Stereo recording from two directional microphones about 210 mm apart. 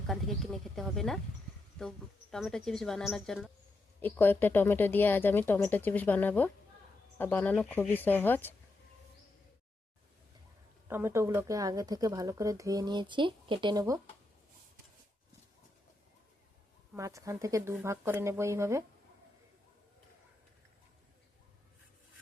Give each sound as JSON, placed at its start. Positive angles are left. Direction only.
{"t": 0.1, "sound": "speech", "side_deg": 0}
{"t": 10.8, "sound": "speech", "side_deg": -10}
{"t": 16.9, "sound": "speech", "side_deg": -15}